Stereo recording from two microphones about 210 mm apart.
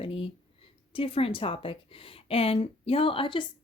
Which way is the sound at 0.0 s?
25° left (ahead or behind).